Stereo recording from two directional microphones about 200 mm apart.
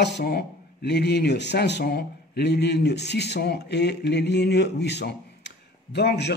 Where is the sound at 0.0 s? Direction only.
55° left (ahead or behind).